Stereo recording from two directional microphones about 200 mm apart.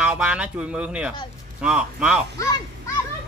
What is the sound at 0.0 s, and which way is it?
Speech, 5° right (ahead or behind).